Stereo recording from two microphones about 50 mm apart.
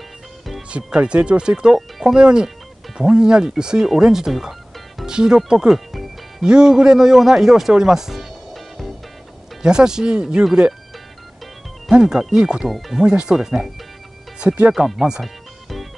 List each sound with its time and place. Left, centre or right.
0.7 s speech: right
1.8 s speech: centre
2.1 s speech: centre
9.6 s speech: centre
11.9 s speech: centre
12.6 s speech: centre
13.0 s speech: centre
14.7 s speech: centre
15.2 s music: centre